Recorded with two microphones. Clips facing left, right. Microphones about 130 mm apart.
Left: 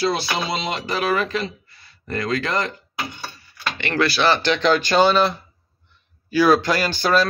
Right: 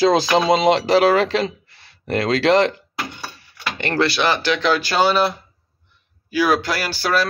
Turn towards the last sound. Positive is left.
turn(degrees=-5)  # may be behind; listen again after turning